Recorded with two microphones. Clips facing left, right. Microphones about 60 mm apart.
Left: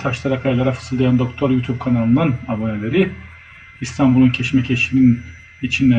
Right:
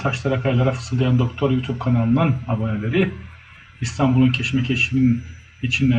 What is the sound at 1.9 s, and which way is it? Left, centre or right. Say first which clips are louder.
A man's voice: left 3 dB; left.